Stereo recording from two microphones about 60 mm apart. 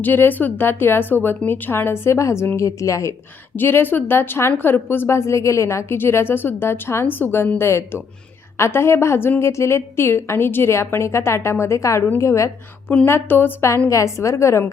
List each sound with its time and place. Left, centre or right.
0.0 s a woman's voice: left
3.5 s a woman's voice: left
13.1 s a woman's voice: left
13.9 s a woman's voice: left